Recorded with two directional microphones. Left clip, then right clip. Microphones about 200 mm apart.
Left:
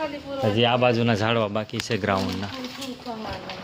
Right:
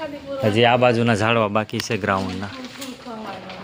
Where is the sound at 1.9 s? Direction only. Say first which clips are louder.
Right 2 dB; 5° right (ahead or behind).